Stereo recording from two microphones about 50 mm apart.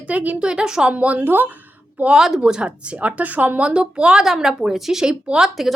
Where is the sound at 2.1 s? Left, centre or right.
Centre.